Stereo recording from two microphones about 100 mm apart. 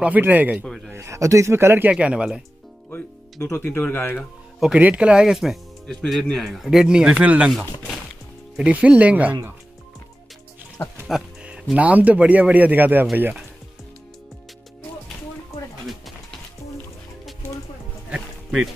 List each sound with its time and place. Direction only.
0.0 s a man's voice: 15° right (ahead or behind)
0.7 s a sound: centre (ahead or behind)
0.9 s speech: 30° right (ahead or behind); by 2.4 s 10° right (ahead or behind)
3.5 s speech: 20° left (ahead or behind)
4.7 s a man's voice: 15° right (ahead or behind)
11.1 s music: 5° right (ahead or behind)
11.7 s a man's voice: 15° right (ahead or behind)
18.1 s a sound: 10° right (ahead or behind)